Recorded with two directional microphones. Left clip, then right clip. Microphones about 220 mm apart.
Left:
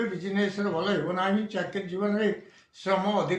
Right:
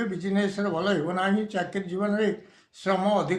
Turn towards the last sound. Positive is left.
turn(degrees=-55)  # may be behind; listen again after turning